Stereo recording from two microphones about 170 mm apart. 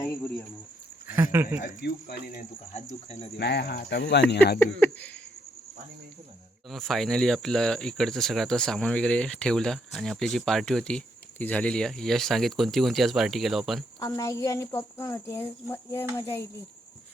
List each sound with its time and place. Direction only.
0.0 s cricket: 15° left (ahead or behind)
1.0 s speech: 15° right (ahead or behind)
1.8 s speech: 65° left (ahead or behind)
2.7 s speech: 40° left (ahead or behind)
3.3 s speech: 75° left (ahead or behind)
4.6 s speech: 10° left (ahead or behind)
6.7 s speech: centre (ahead or behind)
14.0 s speech: 20° left (ahead or behind)